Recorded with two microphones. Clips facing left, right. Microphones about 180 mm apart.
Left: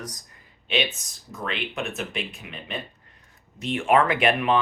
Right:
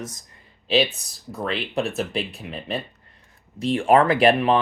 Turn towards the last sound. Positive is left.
turn(degrees=-35)  # may be behind; listen again after turning